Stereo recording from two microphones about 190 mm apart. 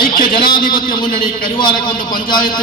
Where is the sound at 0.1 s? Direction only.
50° left (ahead or behind).